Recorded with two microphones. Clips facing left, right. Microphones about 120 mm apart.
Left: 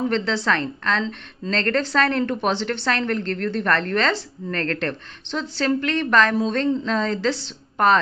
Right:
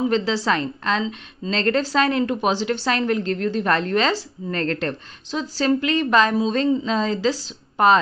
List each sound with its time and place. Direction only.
0.0 s a woman's voice: 10° right (ahead or behind)